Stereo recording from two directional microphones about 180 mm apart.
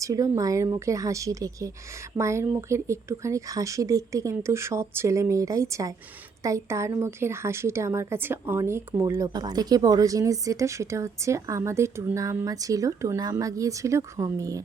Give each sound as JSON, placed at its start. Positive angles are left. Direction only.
{"t": 0.0, "sound": "a woman's voice", "side_deg": -20}